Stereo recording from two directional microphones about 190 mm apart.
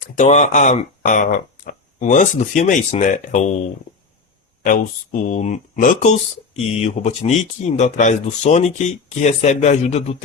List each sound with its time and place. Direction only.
0.2 s speech: 40° left (ahead or behind)
4.6 s speech: 45° left (ahead or behind)